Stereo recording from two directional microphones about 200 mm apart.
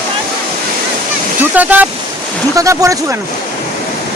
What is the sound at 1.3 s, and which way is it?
Speech, 10° right (ahead or behind).